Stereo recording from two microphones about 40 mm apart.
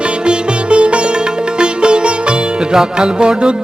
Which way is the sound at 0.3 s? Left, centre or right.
Right.